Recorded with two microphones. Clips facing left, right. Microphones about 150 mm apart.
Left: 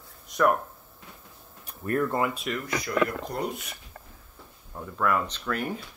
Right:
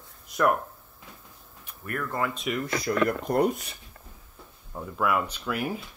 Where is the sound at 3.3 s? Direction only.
55° right (ahead or behind).